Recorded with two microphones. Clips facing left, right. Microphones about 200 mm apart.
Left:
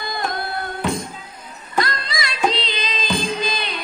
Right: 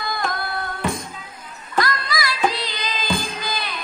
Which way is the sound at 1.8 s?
25° left (ahead or behind).